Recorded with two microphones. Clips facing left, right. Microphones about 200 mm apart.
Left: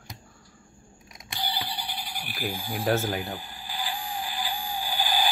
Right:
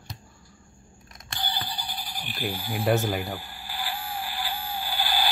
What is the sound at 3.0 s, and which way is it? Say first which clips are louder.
Speech: right 2 dB; 10° right (ahead or behind).